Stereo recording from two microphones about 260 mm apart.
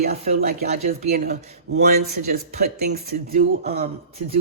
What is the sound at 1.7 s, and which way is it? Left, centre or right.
A man's voice, right.